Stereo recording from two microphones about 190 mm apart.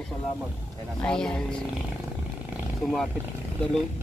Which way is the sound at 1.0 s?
5° left (ahead or behind).